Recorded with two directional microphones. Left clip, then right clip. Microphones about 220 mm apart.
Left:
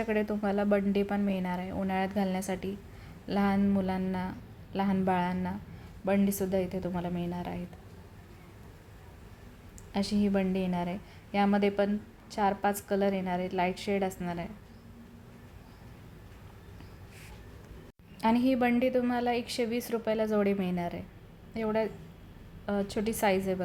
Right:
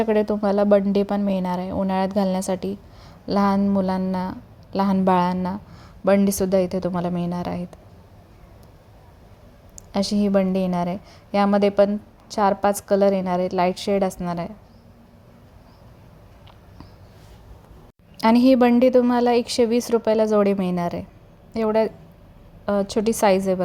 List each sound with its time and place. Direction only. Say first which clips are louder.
0.0 s a woman's voice: right 10 dB; 30° right (ahead or behind)
9.9 s a woman's voice: right 10 dB; 35° right (ahead or behind)
18.2 s a woman's voice: right 11 dB; 40° right (ahead or behind)